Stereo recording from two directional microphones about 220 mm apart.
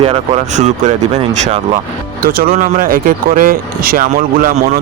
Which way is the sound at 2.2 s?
40° right (ahead or behind).